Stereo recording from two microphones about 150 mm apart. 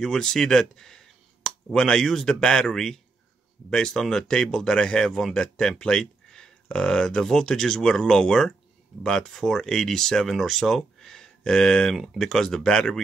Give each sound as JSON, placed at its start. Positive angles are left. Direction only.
{"t": 0.0, "sound": "speech", "side_deg": 5}